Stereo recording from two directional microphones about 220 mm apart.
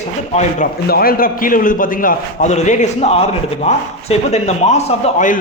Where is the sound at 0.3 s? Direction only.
40° left (ahead or behind).